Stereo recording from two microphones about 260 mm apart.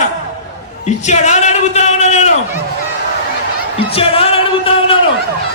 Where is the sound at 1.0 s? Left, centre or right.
Left.